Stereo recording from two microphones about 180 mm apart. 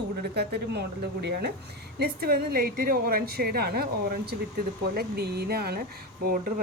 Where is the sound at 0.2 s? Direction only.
65° right (ahead or behind).